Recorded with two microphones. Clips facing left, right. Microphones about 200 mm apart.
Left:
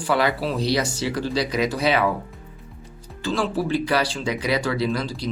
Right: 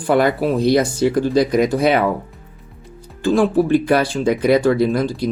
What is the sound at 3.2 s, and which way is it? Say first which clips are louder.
Speech: right 9 dB; 55° right (ahead or behind).